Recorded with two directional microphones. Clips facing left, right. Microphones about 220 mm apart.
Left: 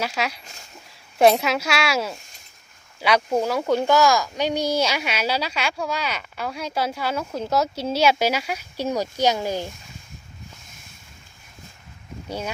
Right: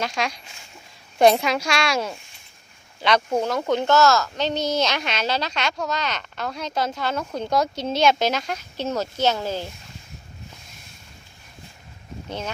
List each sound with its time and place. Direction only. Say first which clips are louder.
0.0 s speech: even; 5° left (ahead or behind)